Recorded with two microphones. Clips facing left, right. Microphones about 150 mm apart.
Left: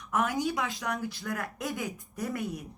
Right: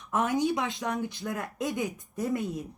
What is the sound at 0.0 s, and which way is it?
Speech, 20° right (ahead or behind).